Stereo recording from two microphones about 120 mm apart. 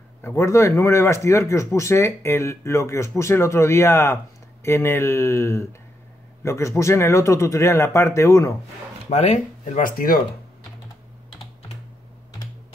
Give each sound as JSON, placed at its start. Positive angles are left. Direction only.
{"t": 0.2, "sound": "speech", "side_deg": 20}
{"t": 9.1, "sound": "speech", "side_deg": 70}